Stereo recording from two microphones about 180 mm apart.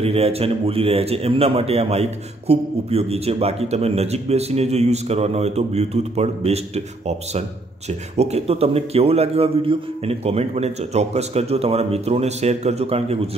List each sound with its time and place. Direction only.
0.0 s a man's voice: 35° right (ahead or behind)